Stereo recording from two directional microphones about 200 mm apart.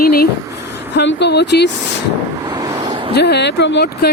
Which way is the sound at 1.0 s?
60° left (ahead or behind).